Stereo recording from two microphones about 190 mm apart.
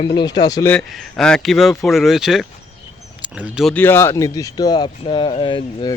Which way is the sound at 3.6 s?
5° left (ahead or behind).